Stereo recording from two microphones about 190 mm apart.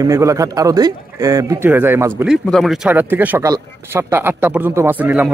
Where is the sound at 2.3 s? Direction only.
Centre (ahead or behind).